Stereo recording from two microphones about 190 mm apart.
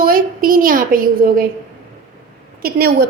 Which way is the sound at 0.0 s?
50° right (ahead or behind).